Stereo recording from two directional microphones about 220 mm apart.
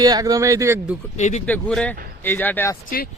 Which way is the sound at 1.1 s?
30° left (ahead or behind).